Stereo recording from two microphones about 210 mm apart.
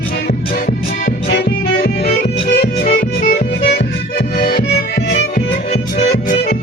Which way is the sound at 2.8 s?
40° left (ahead or behind).